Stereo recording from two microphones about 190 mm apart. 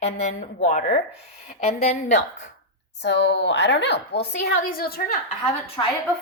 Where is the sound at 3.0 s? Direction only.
65° left (ahead or behind).